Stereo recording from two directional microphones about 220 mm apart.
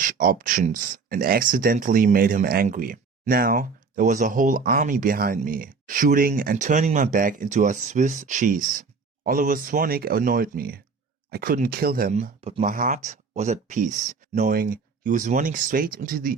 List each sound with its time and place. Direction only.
0.0 s speech: 40° right (ahead or behind)